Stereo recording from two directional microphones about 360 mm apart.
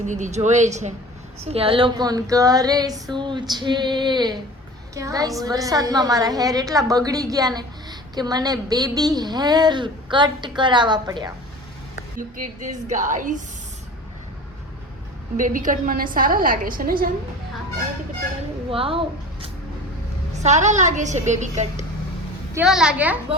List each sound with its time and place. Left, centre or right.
0.0 s a woman's voice: centre
12.1 s a woman's voice: right
15.4 s a woman's voice: right
18.7 s a woman's voice: centre
22.5 s a woman's voice: centre